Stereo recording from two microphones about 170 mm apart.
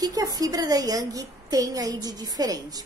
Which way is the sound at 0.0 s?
20° right (ahead or behind).